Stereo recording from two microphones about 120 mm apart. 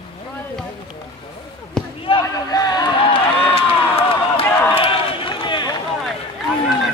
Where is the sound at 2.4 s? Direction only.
30° left (ahead or behind).